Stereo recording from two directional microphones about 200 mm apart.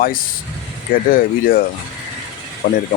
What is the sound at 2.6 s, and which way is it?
Speech, 40° left (ahead or behind).